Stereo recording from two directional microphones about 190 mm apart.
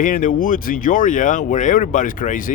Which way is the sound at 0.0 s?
45° left (ahead or behind).